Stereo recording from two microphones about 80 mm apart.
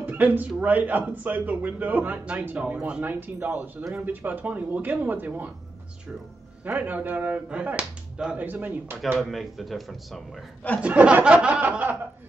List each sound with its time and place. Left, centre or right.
0.0 s a sound: right
0.6 s a man's voice: right
6.6 s a man's voice: right
9.2 s speech: centre
10.8 s speech: centre